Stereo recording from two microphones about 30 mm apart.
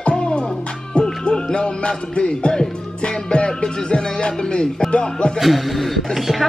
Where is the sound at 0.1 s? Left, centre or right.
Left.